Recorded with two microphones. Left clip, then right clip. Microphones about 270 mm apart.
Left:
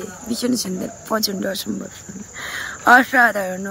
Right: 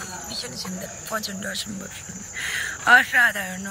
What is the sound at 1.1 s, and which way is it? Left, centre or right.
Speech, left.